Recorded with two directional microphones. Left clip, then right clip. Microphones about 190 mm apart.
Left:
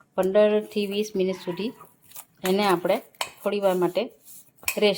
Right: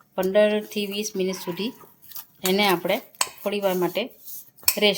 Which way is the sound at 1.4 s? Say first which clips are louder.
Right 1 dB; 10° left (ahead or behind).